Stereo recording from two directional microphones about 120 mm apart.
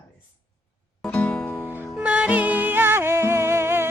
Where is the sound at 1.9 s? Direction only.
10° right (ahead or behind).